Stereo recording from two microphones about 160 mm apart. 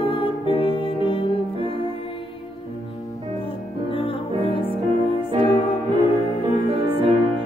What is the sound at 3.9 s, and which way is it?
Music, 35° left (ahead or behind).